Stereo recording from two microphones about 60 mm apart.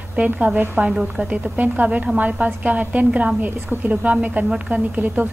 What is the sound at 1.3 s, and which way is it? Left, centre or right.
A woman's voice, right.